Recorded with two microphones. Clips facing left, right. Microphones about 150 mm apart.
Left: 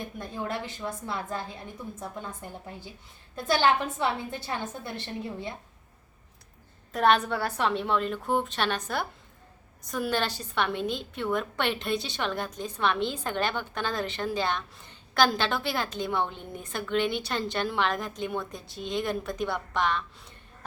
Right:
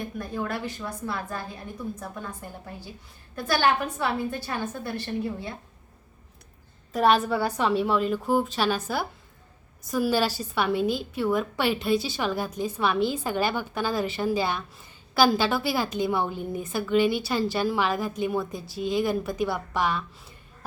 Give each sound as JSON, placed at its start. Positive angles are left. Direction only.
{"t": 0.2, "sound": "a woman's voice", "side_deg": 20}
{"t": 6.9, "sound": "a woman's voice", "side_deg": 0}